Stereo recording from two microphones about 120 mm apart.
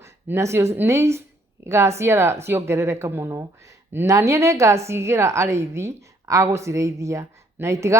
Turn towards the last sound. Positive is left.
turn(degrees=-25)  # may be behind; listen again after turning